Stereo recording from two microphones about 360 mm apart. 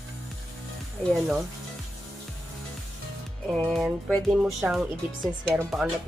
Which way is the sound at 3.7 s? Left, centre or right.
Centre.